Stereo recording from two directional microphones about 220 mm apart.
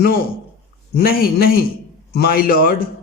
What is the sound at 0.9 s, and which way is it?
A man's voice, 45° left (ahead or behind).